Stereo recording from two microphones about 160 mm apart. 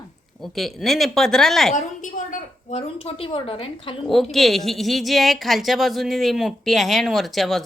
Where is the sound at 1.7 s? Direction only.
50° left (ahead or behind); by 3.9 s 35° left (ahead or behind).